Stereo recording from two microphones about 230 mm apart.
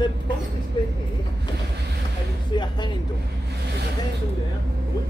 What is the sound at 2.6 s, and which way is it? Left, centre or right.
Speech, centre.